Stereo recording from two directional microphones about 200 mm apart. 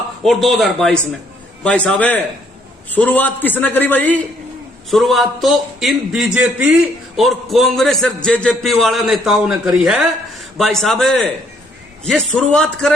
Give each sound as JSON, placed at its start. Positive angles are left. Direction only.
{"t": 0.2, "sound": "a man's voice", "side_deg": 0}